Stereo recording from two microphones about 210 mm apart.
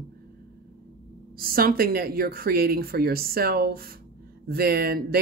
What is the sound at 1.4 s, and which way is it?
Speech, 45° right (ahead or behind).